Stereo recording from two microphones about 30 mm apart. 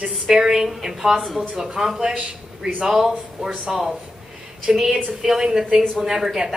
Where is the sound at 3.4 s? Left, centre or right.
Right.